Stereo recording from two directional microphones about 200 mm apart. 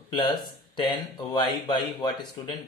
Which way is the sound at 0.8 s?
20° left (ahead or behind).